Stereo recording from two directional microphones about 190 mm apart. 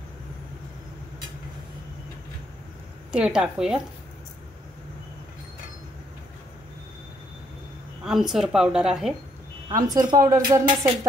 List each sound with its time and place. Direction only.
3.1 s a woman's voice: 5° right (ahead or behind)
8.0 s a woman's voice: centre (ahead or behind)
9.8 s speech: 20° right (ahead or behind)